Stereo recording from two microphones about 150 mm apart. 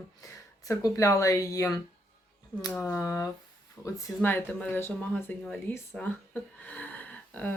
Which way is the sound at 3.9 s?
20° left (ahead or behind).